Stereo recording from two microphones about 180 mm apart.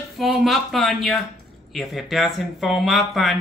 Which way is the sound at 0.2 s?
Centre (ahead or behind).